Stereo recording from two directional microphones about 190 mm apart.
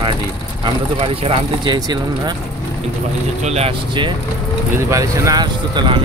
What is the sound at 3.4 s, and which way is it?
Speech, 35° right (ahead or behind).